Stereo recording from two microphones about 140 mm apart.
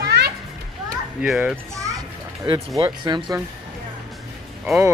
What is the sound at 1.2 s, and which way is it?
Speech, 5° right (ahead or behind).